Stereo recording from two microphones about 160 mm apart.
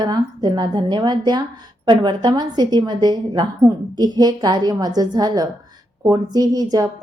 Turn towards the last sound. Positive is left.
turn(degrees=-25)  # may be behind; listen again after turning